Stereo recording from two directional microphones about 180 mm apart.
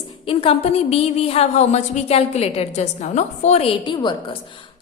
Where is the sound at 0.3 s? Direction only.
35° left (ahead or behind).